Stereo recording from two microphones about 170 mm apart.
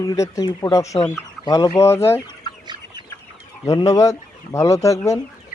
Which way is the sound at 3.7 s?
20° left (ahead or behind).